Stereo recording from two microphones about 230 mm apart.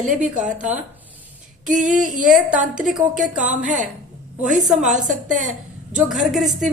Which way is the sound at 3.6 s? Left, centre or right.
Right.